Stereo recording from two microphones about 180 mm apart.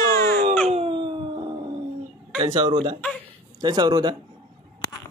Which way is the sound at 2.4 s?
25° right (ahead or behind).